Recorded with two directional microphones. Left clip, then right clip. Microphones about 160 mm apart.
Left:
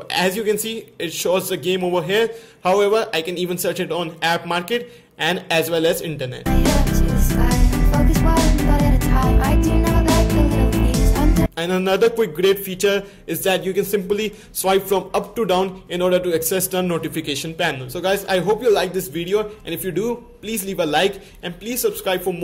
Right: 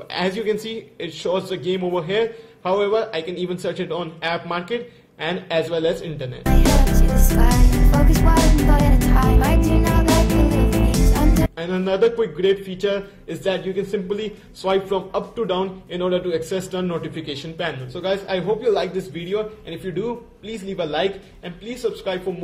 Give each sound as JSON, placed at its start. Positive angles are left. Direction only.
{"t": 0.1, "sound": "a man's voice", "side_deg": 15}
{"t": 6.4, "sound": "music", "side_deg": 0}
{"t": 11.5, "sound": "a man's voice", "side_deg": 25}